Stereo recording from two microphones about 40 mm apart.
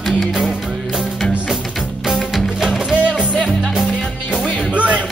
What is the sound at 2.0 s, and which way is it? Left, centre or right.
Music, centre.